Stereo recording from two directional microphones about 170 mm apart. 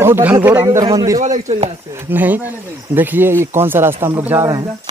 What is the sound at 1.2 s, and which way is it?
Speech, 45° right (ahead or behind).